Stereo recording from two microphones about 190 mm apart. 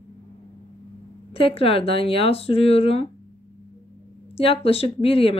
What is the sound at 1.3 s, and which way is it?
Speech, 30° left (ahead or behind).